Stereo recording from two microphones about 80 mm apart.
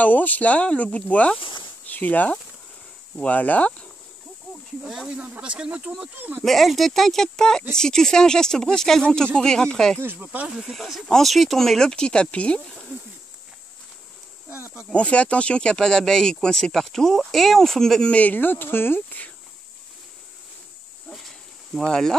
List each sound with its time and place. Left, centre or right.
0.0 s speech: left
4.8 s speech: centre
6.1 s speech: right
6.4 s speech: centre
10.1 s speech: centre
10.6 s speech: centre
14.9 s speech: centre
18.1 s speech: left
21.1 s a sound: centre